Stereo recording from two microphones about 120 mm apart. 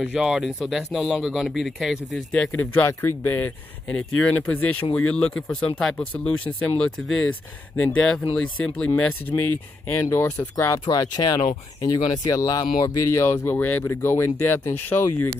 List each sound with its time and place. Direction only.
0.0 s speech: 5° right (ahead or behind); by 15.0 s 15° left (ahead or behind)